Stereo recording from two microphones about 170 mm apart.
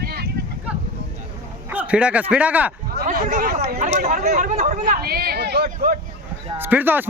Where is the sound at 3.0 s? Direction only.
50° right (ahead or behind).